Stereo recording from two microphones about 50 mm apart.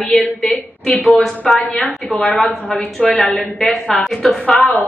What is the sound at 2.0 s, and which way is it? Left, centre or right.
Speech, left.